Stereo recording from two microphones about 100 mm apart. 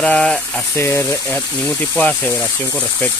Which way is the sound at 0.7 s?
25° left (ahead or behind).